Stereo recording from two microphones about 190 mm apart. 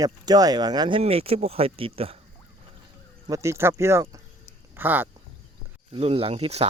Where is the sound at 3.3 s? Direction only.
15° right (ahead or behind).